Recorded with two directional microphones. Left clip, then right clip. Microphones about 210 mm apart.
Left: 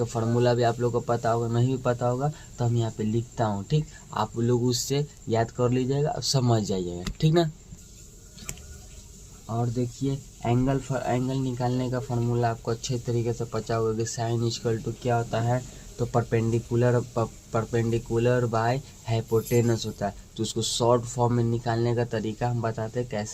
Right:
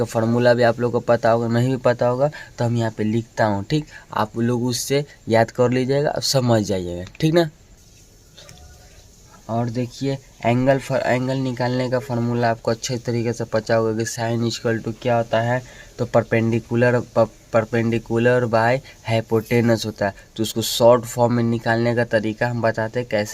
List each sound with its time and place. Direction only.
0.0 s speech: 55° right (ahead or behind)
9.6 s speech: 50° right (ahead or behind)